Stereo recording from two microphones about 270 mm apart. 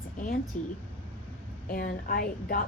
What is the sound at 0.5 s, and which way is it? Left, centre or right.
A woman's voice, left.